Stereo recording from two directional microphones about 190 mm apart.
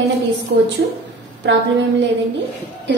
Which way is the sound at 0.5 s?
65° right (ahead or behind).